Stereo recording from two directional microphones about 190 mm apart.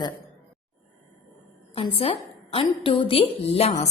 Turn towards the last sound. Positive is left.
turn(degrees=30)  # may be behind; listen again after turning